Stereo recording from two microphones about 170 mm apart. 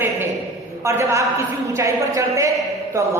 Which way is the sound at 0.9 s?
15° right (ahead or behind).